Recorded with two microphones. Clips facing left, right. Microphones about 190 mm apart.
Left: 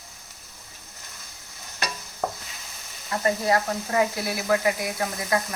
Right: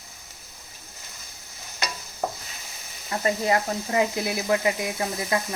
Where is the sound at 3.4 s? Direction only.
20° right (ahead or behind).